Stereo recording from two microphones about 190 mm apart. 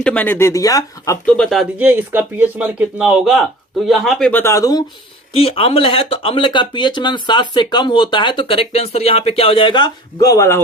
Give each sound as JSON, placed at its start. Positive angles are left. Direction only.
{"t": 0.0, "sound": "speech", "side_deg": 5}
{"t": 1.4, "sound": "speech", "side_deg": 0}
{"t": 5.3, "sound": "speech", "side_deg": 30}